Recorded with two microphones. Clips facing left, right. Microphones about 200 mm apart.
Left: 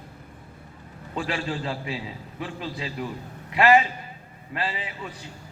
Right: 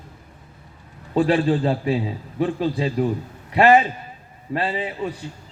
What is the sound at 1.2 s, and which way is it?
A man's voice, 35° right (ahead or behind).